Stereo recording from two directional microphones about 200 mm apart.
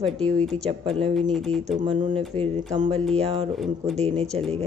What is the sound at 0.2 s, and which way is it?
Speech, 5° left (ahead or behind).